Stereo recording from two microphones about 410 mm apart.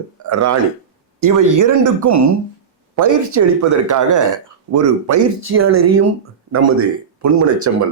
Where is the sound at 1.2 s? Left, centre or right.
Right.